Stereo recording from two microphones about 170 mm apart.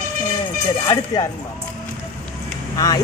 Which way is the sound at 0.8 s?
20° left (ahead or behind).